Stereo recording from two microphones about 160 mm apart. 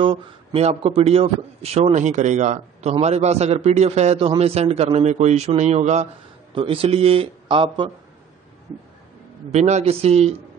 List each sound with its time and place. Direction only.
0.0 s speech: 35° right (ahead or behind)
9.5 s speech: 45° right (ahead or behind)